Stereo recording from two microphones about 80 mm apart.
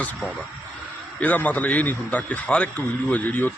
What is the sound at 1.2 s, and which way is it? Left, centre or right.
A man's voice, centre.